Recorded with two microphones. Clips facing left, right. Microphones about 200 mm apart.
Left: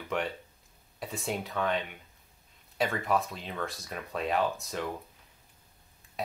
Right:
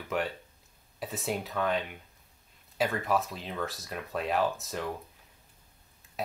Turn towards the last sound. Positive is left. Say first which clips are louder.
# even
turn(degrees=0)  # may be behind; listen again after turning